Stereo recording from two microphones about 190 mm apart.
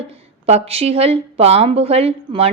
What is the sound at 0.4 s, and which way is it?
A woman's voice, 30° right (ahead or behind).